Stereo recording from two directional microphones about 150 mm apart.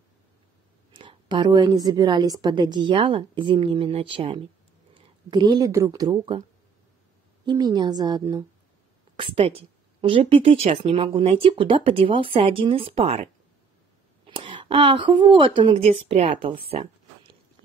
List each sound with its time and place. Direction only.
0.9 s speech: 30° right (ahead or behind)
7.4 s a woman's voice: 25° right (ahead or behind)
9.1 s speech: 35° right (ahead or behind)